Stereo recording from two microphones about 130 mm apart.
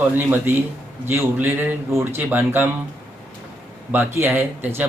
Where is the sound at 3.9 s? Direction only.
15° right (ahead or behind).